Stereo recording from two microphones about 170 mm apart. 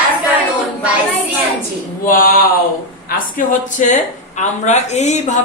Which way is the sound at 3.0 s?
50° left (ahead or behind).